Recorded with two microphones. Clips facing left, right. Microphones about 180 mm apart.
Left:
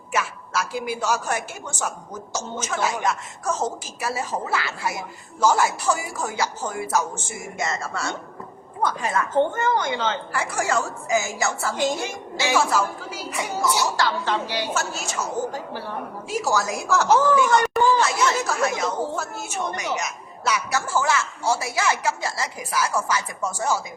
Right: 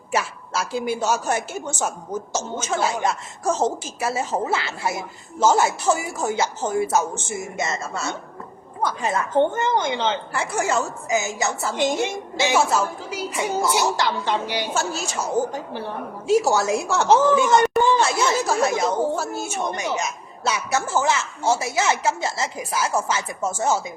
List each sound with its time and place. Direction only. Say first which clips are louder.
0.1 s a woman's voice: right 1 dB; 30° right (ahead or behind)
16.2 s a woman's voice: right 6 dB; 25° right (ahead or behind)